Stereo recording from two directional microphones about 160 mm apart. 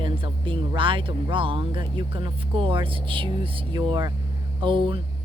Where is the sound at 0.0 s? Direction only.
30° right (ahead or behind).